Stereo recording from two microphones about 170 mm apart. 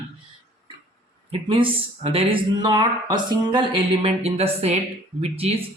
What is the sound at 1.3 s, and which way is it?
Speech, 30° right (ahead or behind).